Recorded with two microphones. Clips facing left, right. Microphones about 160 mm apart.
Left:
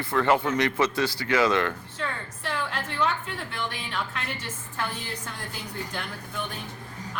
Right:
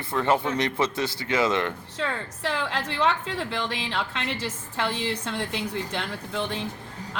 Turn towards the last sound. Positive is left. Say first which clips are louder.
# right 4 dB
turn(degrees=-90)